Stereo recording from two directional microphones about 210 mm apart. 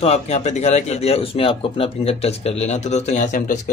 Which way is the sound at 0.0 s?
30° left (ahead or behind).